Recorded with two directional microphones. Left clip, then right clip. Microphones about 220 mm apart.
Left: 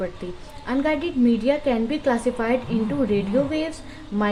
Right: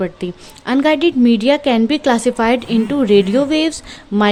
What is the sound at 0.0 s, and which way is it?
A woman's voice, 50° right (ahead or behind).